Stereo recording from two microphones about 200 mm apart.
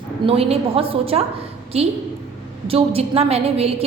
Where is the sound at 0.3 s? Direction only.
30° right (ahead or behind).